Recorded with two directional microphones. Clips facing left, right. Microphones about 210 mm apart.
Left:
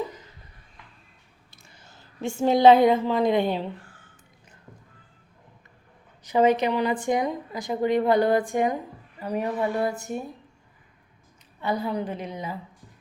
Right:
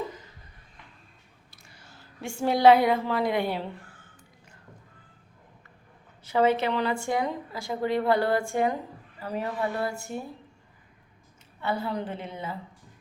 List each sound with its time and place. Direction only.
1.5 s a woman's voice: 20° left (ahead or behind)
6.2 s speech: 15° left (ahead or behind)
11.6 s speech: 15° left (ahead or behind)